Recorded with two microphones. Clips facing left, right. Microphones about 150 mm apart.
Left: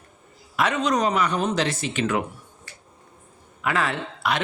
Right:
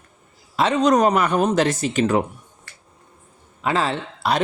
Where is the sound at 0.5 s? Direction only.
30° right (ahead or behind).